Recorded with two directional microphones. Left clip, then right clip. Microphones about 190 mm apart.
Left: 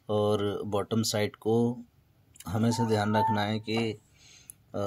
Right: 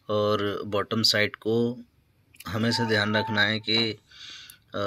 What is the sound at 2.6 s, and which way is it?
Speech, 10° left (ahead or behind).